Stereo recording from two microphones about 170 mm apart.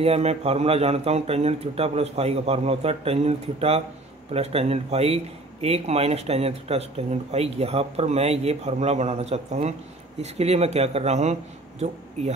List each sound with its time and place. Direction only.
0.0 s a man's voice: 35° right (ahead or behind)